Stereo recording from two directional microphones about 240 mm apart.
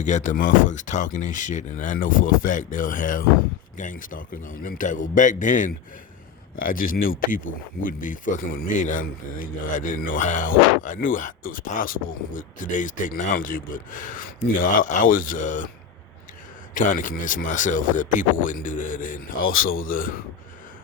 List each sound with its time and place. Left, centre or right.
0.0 s speech: left
16.7 s speech: left